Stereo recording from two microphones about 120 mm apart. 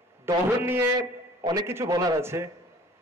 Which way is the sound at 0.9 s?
35° right (ahead or behind).